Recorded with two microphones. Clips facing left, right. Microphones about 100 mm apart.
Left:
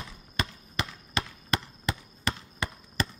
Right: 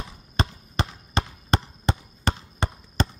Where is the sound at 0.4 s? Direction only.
30° right (ahead or behind).